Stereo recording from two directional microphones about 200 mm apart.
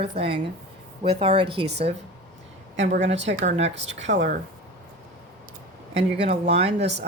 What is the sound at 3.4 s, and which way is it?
Speech, 35° right (ahead or behind).